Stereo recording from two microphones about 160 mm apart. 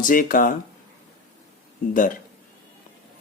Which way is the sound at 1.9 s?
60° left (ahead or behind).